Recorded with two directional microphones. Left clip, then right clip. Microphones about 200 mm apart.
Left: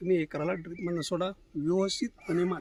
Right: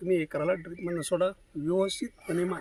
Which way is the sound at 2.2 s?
40° left (ahead or behind).